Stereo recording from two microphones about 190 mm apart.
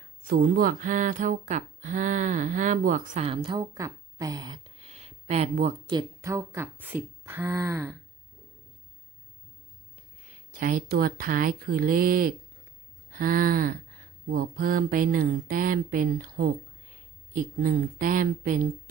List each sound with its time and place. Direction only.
0.3 s speech: 50° right (ahead or behind)
5.9 s speech: 20° right (ahead or behind)
10.2 s speech: 45° right (ahead or behind)
13.1 s a sound: 50° right (ahead or behind)
14.3 s speech: 50° right (ahead or behind)